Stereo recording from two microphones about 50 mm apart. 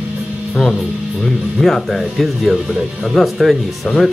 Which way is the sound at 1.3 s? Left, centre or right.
Centre.